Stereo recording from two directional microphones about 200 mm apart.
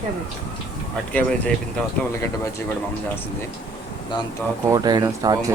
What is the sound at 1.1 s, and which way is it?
Speech, 5° left (ahead or behind).